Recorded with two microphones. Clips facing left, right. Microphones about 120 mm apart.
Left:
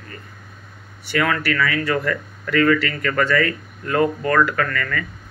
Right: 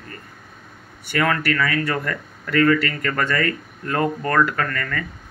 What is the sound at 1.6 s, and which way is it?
Speech, 40° right (ahead or behind).